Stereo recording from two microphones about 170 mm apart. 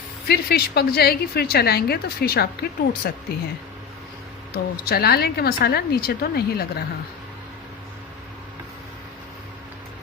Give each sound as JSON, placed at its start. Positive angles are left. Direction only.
{"t": 0.3, "sound": "a woman's voice", "side_deg": 65}
{"t": 4.5, "sound": "a woman's voice", "side_deg": 65}